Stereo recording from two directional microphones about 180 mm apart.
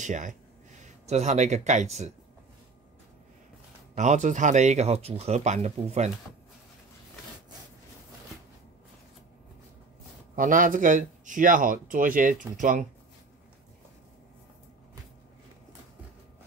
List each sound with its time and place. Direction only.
0.0 s speech: 45° right (ahead or behind)
3.9 s speech: 40° right (ahead or behind)
10.3 s speech: 50° right (ahead or behind)